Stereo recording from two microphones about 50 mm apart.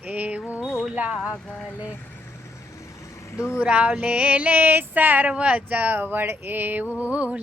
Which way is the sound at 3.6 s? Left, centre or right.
Right.